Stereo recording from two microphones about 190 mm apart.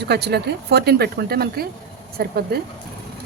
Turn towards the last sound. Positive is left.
turn(degrees=-55)  # may be behind; listen again after turning